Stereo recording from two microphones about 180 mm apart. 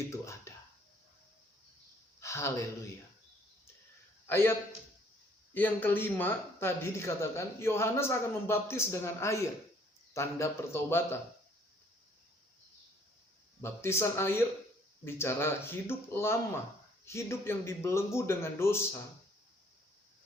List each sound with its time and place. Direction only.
0.1 s finger snapping: 15° left (ahead or behind)
2.2 s speech: 15° left (ahead or behind)
4.3 s a man's voice: 10° left (ahead or behind)
5.5 s a man's voice: 10° left (ahead or behind)
13.6 s a man's voice: 15° left (ahead or behind)